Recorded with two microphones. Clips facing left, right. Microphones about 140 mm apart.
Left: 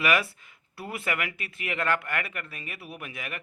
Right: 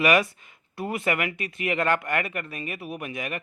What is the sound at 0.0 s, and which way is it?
Speech, 20° right (ahead or behind).